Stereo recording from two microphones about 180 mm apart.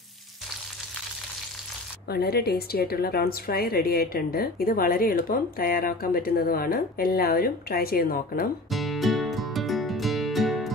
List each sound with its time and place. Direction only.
2.0 s a woman's voice: 60° left (ahead or behind)
8.6 s music: centre (ahead or behind)